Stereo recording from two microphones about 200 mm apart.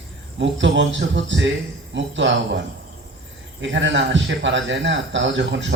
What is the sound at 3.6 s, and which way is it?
A man's voice, 65° right (ahead or behind).